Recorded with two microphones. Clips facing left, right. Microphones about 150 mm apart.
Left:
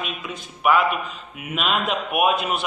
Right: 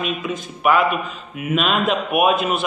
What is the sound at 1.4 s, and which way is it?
Speech, 5° left (ahead or behind).